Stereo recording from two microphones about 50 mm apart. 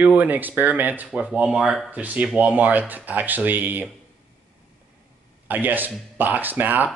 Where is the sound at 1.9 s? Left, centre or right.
Right.